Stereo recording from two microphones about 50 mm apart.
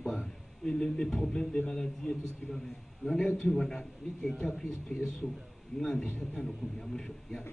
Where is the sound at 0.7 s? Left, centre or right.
Centre.